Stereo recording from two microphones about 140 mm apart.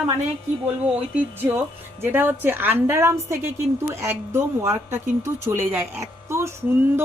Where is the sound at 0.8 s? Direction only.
10° right (ahead or behind).